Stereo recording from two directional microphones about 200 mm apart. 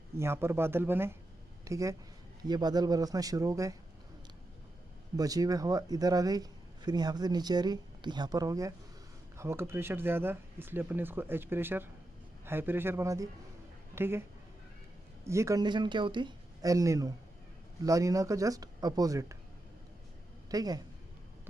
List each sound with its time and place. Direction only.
0.2 s speech: 10° right (ahead or behind)
5.1 s speech: 20° right (ahead or behind)
20.5 s speech: 20° right (ahead or behind)